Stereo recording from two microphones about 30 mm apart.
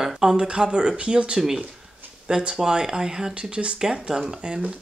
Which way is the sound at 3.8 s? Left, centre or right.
Centre.